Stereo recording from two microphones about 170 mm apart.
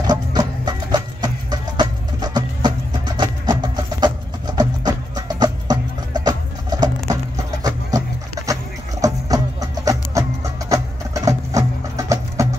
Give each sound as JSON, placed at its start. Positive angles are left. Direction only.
{"t": 0.0, "sound": "music", "side_deg": -25}
{"t": 9.0, "sound": "music", "side_deg": -20}